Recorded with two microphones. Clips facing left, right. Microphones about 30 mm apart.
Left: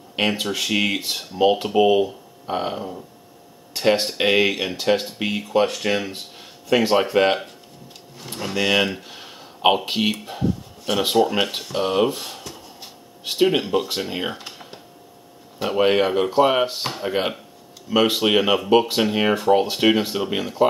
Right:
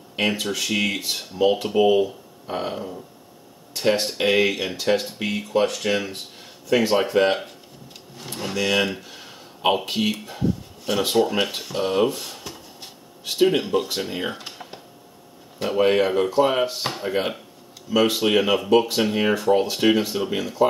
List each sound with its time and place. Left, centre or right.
0.1 s speech: left
6.7 s speech: left
8.2 s speech: centre
8.5 s speech: centre
14.4 s computer keyboard: centre
15.8 s speech: left
16.8 s speech: centre
17.8 s speech: left